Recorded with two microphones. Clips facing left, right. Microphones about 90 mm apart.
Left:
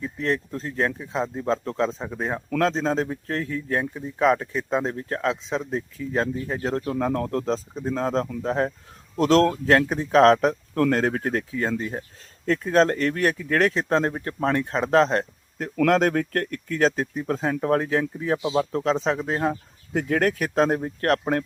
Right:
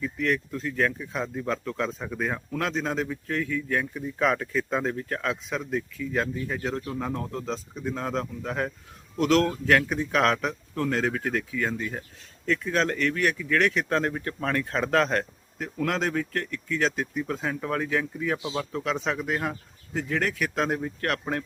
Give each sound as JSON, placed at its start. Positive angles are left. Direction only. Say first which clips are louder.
{"t": 0.0, "sound": "a man's voice", "louder": "left 1 dB", "side_deg": 30}
{"t": 7.4, "sound": "a man's voice", "louder": "left 5 dB", "side_deg": 35}
{"t": 10.8, "sound": "a man's voice", "louder": "left 4 dB", "side_deg": 50}
{"t": 13.8, "sound": "speech", "louder": "left 3 dB", "side_deg": 25}
{"t": 15.9, "sound": "a man's voice", "louder": "left 7 dB", "side_deg": 50}
{"t": 18.7, "sound": "a man's voice", "louder": "left 6 dB", "side_deg": 40}
{"t": 18.9, "sound": "speech", "louder": "left 4 dB", "side_deg": 30}
{"t": 19.9, "sound": "speech", "louder": "left 6 dB", "side_deg": 50}